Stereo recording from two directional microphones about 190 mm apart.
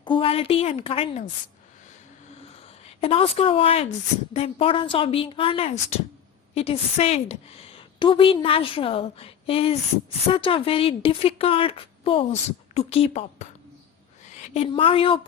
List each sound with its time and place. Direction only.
0.0 s a woman's voice: 25° left (ahead or behind)
2.4 s a sound: 30° left (ahead or behind)
4.4 s a woman's voice: 30° left (ahead or behind)